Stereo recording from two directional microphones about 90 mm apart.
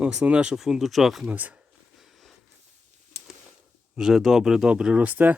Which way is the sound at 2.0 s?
Centre (ahead or behind).